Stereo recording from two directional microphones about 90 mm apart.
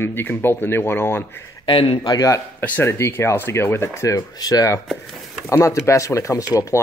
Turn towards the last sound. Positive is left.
turn(degrees=40)  # may be behind; listen again after turning